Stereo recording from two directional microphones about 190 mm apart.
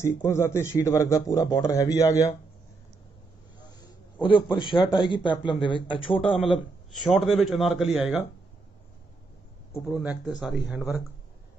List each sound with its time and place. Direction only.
0.0 s a man's voice: 15° left (ahead or behind)
3.6 s a man's voice: 25° left (ahead or behind)
6.4 s a man's voice: centre (ahead or behind)
9.8 s a man's voice: centre (ahead or behind)